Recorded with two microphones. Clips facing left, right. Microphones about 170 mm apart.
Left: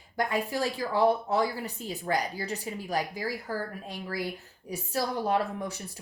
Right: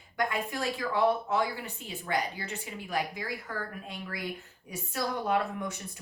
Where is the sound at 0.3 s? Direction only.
35° left (ahead or behind).